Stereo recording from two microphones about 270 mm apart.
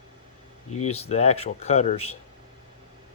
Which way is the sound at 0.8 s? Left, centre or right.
Left.